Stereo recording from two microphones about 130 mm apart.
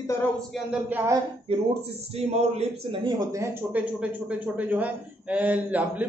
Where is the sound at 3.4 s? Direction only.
10° right (ahead or behind).